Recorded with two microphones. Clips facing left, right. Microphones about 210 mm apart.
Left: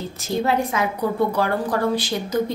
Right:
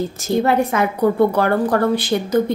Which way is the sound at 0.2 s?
60° right (ahead or behind).